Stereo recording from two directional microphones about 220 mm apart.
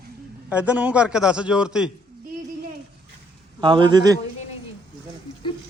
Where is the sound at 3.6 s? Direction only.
20° right (ahead or behind).